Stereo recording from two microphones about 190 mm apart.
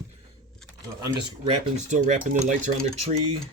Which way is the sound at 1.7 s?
40° right (ahead or behind).